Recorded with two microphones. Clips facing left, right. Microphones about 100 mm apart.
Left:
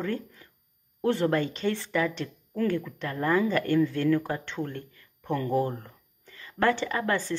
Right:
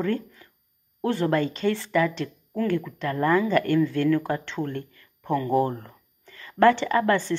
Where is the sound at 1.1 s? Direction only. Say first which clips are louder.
Right 1 dB; 25° left (ahead or behind).